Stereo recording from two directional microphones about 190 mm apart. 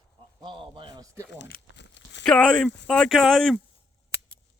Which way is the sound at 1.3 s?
60° left (ahead or behind).